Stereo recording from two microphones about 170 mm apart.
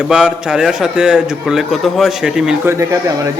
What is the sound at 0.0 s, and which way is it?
A man's voice, 5° right (ahead or behind).